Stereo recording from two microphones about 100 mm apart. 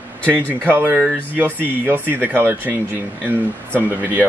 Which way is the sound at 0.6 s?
20° right (ahead or behind).